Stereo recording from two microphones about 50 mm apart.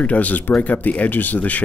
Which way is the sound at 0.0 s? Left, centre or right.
Left.